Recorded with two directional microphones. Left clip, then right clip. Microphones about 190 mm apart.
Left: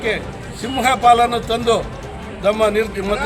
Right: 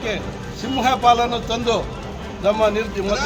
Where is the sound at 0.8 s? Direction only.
10° left (ahead or behind).